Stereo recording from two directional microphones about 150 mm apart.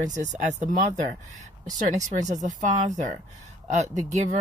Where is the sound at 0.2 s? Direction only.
50° right (ahead or behind).